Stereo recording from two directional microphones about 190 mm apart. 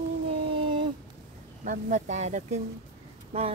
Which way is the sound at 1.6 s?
40° right (ahead or behind).